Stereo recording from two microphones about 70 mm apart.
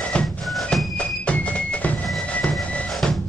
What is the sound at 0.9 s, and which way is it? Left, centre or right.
Music, centre.